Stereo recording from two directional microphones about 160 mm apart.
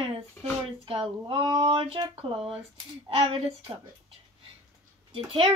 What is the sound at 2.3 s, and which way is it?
Speech, 5° right (ahead or behind).